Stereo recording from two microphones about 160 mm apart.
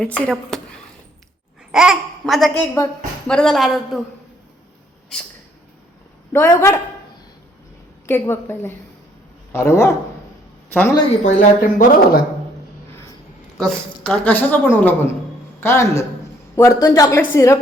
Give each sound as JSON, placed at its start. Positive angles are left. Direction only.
{"t": 0.0, "sound": "a child's voice", "side_deg": 5}
{"t": 1.7, "sound": "a child's voice", "side_deg": -5}
{"t": 6.3, "sound": "a woman's voice", "side_deg": 15}
{"t": 8.0, "sound": "a woman's voice", "side_deg": 15}
{"t": 11.3, "sound": "speech", "side_deg": 55}
{"t": 13.6, "sound": "a woman's voice", "side_deg": 5}